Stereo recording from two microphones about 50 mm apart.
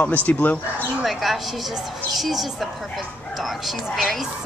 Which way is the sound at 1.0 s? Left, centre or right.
Centre.